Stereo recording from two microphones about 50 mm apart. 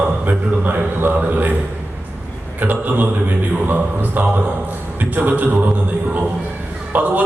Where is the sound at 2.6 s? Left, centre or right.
Right.